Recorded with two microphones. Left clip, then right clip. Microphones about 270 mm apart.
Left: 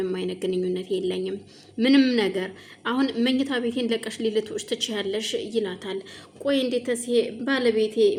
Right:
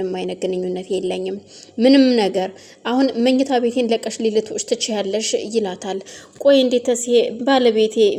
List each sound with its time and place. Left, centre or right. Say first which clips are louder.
0.1 s a woman's voice: right 5 dB; centre